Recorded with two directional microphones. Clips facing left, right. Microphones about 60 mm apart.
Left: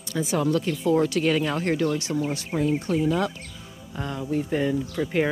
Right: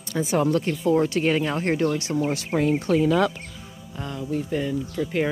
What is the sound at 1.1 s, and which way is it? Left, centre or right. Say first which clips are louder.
Speech: right 1 dB; right.